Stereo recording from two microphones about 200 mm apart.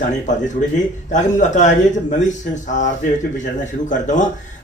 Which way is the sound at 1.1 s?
40° left (ahead or behind).